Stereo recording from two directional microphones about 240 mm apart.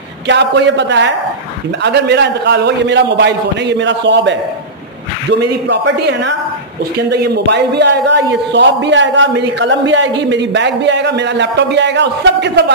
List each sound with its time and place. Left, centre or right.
0.3 s a man's voice: right
5.4 s a man's voice: right